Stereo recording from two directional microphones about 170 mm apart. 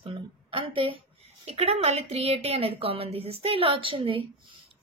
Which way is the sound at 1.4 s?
40° right (ahead or behind).